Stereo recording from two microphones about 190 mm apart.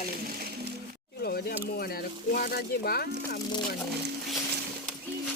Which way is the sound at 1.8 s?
50° left (ahead or behind).